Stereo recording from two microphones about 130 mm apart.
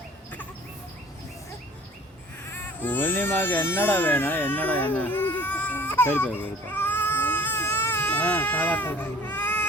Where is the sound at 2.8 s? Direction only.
15° left (ahead or behind).